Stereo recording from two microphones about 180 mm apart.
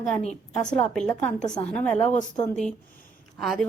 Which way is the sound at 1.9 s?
40° left (ahead or behind).